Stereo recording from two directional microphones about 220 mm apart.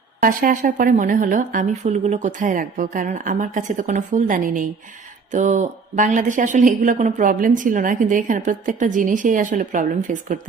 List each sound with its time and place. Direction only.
0.2 s speech: 35° right (ahead or behind)